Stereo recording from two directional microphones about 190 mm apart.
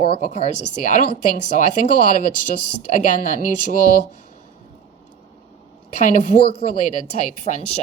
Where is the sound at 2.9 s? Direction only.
40° left (ahead or behind).